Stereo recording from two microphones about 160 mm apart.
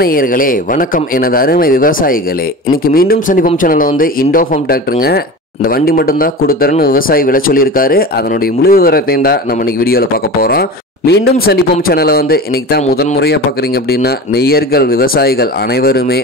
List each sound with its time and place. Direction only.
0.0 s a man's voice: 65° left (ahead or behind)
11.1 s a man's voice: 80° left